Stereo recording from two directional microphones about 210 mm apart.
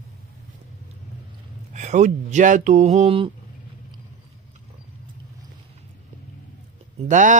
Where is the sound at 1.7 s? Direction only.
35° right (ahead or behind).